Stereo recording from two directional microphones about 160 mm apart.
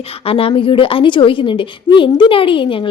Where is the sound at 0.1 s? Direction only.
35° left (ahead or behind).